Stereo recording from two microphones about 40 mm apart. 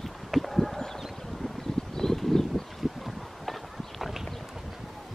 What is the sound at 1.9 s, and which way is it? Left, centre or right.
Clip-clop, centre.